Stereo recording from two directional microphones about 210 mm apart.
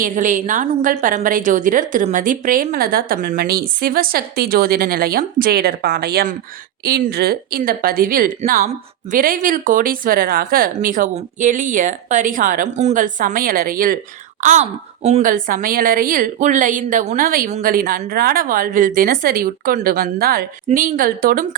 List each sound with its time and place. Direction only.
0.0 s a woman's voice: 40° right (ahead or behind)